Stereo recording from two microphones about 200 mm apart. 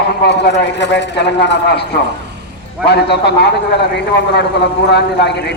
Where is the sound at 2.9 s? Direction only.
55° left (ahead or behind).